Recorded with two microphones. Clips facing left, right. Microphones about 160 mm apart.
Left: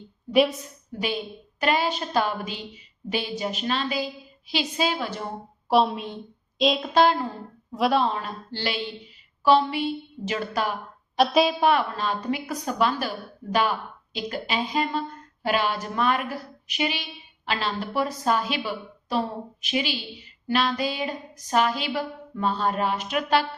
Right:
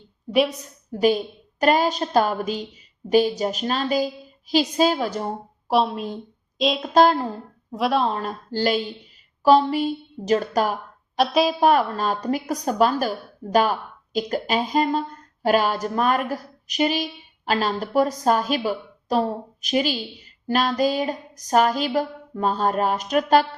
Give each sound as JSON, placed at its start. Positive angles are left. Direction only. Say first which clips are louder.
{"t": 0.3, "sound": "a woman's voice", "louder": "even", "side_deg": 0}
{"t": 0.9, "sound": "a woman's voice", "louder": "right 9 dB", "side_deg": -45}
{"t": 5.7, "sound": "a woman's voice", "louder": "even", "side_deg": 0}
{"t": 6.9, "sound": "a woman's voice", "louder": "right 5 dB", "side_deg": -45}
{"t": 7.8, "sound": "a woman's voice", "louder": "right 1 dB", "side_deg": 0}
{"t": 8.1, "sound": "a woman's voice", "louder": "right 5 dB", "side_deg": -45}
{"t": 11.2, "sound": "a woman's voice", "louder": "right 1 dB", "side_deg": 0}
{"t": 11.6, "sound": "a woman's voice", "louder": "right 4 dB", "side_deg": -40}